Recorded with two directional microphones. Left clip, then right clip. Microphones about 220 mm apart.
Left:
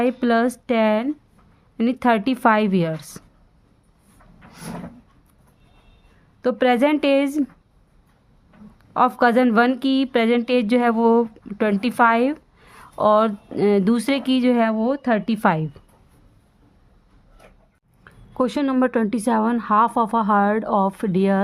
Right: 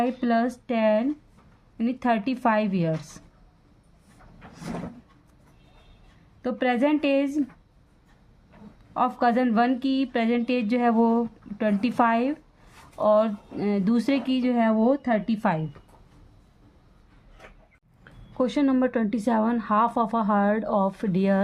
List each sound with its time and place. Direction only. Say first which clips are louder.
0.0 s a woman's voice: left 5 dB; 45° left (ahead or behind)
6.4 s a woman's voice: left 6 dB; 45° left (ahead or behind)
8.9 s a woman's voice: left 6 dB; 45° left (ahead or behind)
18.0 s a woman's voice: left 4 dB; 30° left (ahead or behind)